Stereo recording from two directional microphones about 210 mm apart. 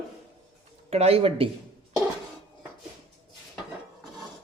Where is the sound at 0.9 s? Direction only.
30° right (ahead or behind).